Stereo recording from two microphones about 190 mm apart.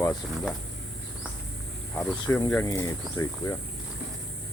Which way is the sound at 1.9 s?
10° left (ahead or behind).